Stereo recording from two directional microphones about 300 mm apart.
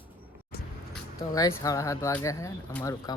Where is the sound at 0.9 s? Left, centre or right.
Centre.